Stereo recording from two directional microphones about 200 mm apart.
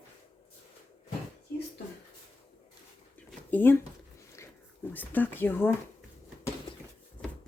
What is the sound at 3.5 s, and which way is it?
Speech, 10° left (ahead or behind).